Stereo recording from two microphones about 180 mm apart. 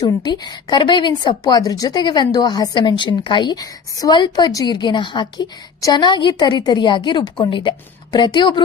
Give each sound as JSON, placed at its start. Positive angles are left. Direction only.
{"t": 0.0, "sound": "a woman's voice", "side_deg": 25}